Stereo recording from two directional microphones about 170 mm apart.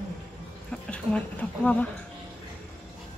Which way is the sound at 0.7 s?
5° left (ahead or behind).